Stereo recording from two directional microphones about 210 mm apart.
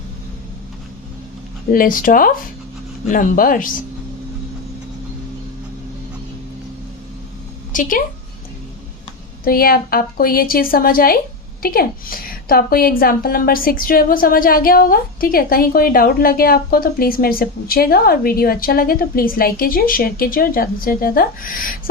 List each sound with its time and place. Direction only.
1.7 s speech: 40° left (ahead or behind)
7.7 s a woman's voice: 40° left (ahead or behind)
9.4 s a woman's voice: 45° left (ahead or behind)